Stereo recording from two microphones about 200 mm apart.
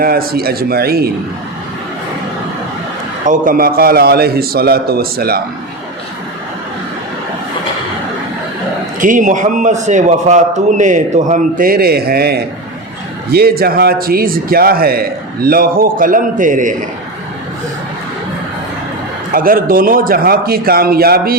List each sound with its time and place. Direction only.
0.0 s a man's voice: 50° right (ahead or behind)
3.2 s a man's voice: 40° right (ahead or behind)
9.0 s a man's voice: 40° right (ahead or behind)
19.3 s a man's voice: 45° right (ahead or behind)